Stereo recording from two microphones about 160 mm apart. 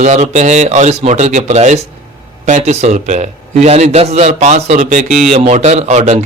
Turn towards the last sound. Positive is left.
turn(degrees=-50)  # may be behind; listen again after turning